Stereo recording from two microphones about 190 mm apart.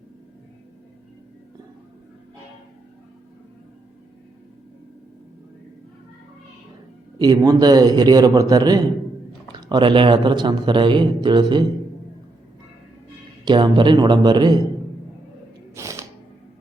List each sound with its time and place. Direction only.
7.2 s speech: 20° right (ahead or behind)
13.4 s speech: 25° right (ahead or behind)
15.7 s a sound: 15° right (ahead or behind)